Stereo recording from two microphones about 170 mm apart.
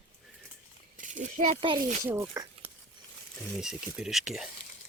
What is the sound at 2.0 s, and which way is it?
Speech, 15° right (ahead or behind).